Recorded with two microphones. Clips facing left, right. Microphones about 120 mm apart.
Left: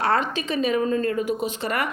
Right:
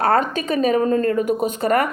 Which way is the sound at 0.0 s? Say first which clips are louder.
Right 5 dB; 45° right (ahead or behind).